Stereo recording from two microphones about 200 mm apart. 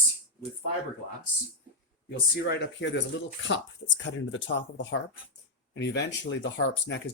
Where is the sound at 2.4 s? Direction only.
55° left (ahead or behind).